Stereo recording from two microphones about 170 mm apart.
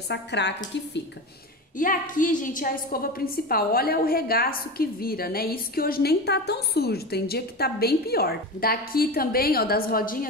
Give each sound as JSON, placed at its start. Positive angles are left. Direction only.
{"t": 0.1, "sound": "a woman's voice", "side_deg": 90}
{"t": 1.8, "sound": "a woman's voice", "side_deg": 50}